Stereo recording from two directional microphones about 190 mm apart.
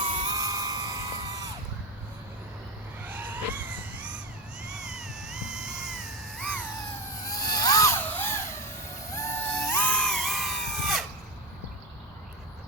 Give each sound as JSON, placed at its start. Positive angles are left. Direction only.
{"t": 0.0, "sound": "music", "side_deg": -25}
{"t": 3.0, "sound": "vehicle", "side_deg": -10}
{"t": 4.6, "sound": "cat", "side_deg": -5}
{"t": 7.3, "sound": "a sound", "side_deg": 20}